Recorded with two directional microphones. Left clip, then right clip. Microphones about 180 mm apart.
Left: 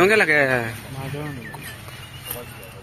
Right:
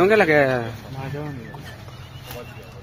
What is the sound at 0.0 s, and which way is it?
Speech, 10° right (ahead or behind).